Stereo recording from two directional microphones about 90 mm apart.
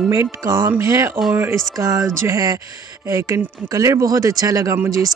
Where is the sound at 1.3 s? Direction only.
20° right (ahead or behind).